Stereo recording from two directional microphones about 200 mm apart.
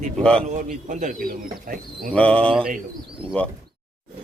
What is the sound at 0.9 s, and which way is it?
Speech, 40° right (ahead or behind).